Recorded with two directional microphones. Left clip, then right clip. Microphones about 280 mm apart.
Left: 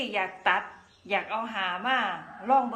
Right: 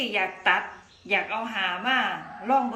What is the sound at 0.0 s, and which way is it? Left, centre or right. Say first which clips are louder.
A woman's voice: right 3 dB; centre.